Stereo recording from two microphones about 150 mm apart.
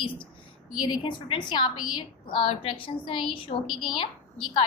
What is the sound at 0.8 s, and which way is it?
A woman's voice, 30° left (ahead or behind).